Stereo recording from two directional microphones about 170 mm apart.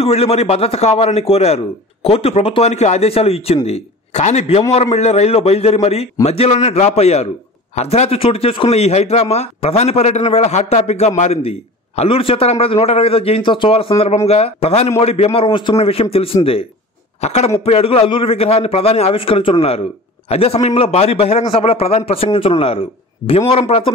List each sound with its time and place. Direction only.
0.0 s a man's voice: 35° left (ahead or behind)